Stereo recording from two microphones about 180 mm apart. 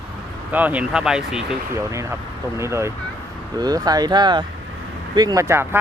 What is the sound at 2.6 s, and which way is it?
Speech, 15° right (ahead or behind).